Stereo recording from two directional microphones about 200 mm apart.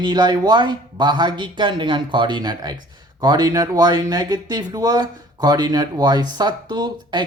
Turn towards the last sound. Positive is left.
turn(degrees=-20)  # may be behind; listen again after turning